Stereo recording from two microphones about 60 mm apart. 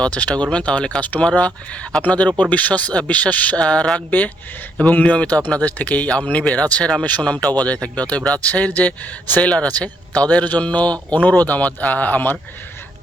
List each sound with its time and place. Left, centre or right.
0.0 s a man's voice: left
3.9 s a man's voice: left